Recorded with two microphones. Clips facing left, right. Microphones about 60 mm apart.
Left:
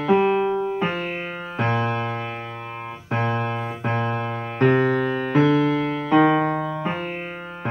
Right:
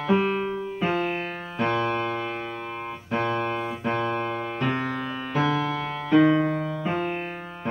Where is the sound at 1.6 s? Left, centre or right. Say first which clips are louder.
Left 1 dB; left.